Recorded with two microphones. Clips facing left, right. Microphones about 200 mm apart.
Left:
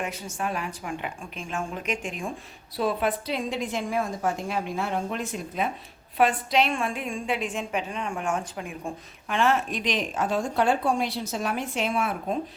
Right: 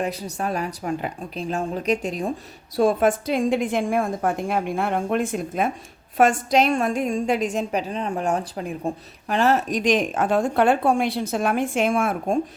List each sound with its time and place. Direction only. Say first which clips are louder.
0.0 s a woman's voice: right 5 dB; 35° right (ahead or behind)